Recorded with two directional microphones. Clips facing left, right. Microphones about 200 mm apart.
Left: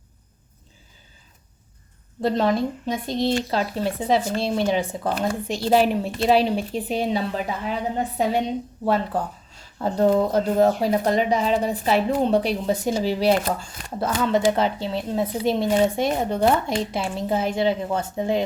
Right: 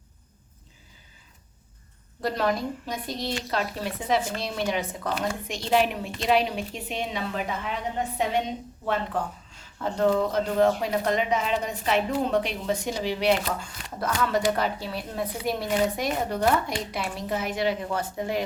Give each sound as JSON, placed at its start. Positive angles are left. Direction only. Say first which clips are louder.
{"t": 2.2, "sound": "speech", "louder": "left 5 dB", "side_deg": 25}
{"t": 14.0, "sound": "speech", "louder": "left 4 dB", "side_deg": 25}